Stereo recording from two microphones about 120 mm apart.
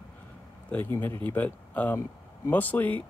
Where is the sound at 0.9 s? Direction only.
20° left (ahead or behind).